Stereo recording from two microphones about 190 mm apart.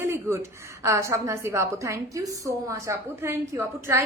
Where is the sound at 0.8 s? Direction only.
15° right (ahead or behind).